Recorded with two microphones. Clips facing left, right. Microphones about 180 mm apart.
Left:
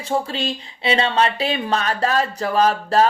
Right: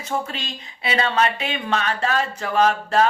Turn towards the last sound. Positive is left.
turn(degrees=35)  # may be behind; listen again after turning